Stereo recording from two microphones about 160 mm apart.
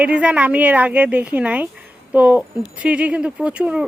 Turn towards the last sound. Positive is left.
turn(degrees=-5)  # may be behind; listen again after turning